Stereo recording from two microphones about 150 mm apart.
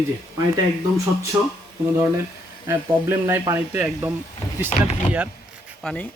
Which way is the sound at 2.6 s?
15° right (ahead or behind).